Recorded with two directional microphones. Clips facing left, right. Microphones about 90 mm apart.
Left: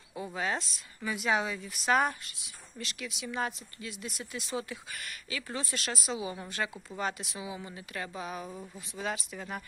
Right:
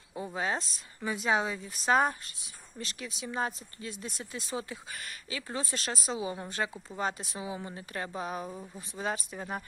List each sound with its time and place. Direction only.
0.3 s speech: 35° right (ahead or behind)
5.7 s speech: 35° right (ahead or behind)
8.4 s speech: 5° right (ahead or behind)
9.4 s speech: 30° right (ahead or behind)